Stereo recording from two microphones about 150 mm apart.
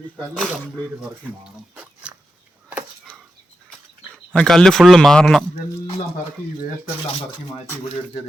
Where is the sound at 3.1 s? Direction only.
5° left (ahead or behind).